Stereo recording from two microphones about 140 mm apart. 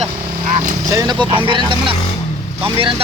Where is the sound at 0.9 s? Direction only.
25° right (ahead or behind).